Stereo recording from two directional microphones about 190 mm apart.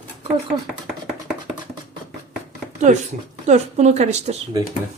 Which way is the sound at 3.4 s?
35° right (ahead or behind).